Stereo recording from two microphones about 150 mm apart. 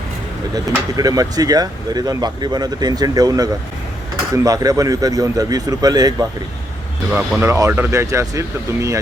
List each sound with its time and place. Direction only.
0.7 s speech: 25° right (ahead or behind)
7.1 s speech: 5° right (ahead or behind)
7.4 s speech: 20° right (ahead or behind)